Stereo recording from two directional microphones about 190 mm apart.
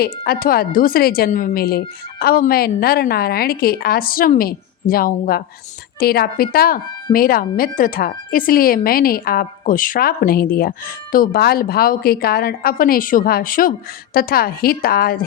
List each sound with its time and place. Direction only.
0.0 s speech: 50° left (ahead or behind)